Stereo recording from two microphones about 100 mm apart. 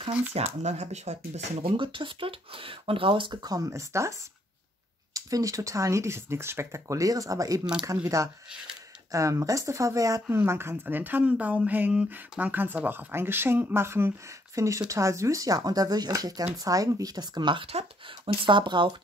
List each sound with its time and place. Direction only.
0.3 s speech: 90° right; by 3.3 s 55° right (ahead or behind)
3.4 s speech: 35° right (ahead or behind)
5.1 s speech: 35° right (ahead or behind)
17.6 s speech: 70° right (ahead or behind); by 18.9 s 50° right (ahead or behind)